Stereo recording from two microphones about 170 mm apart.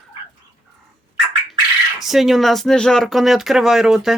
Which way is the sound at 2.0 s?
Centre (ahead or behind).